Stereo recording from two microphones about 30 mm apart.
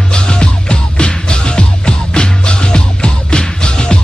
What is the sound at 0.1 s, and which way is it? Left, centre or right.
Music, left.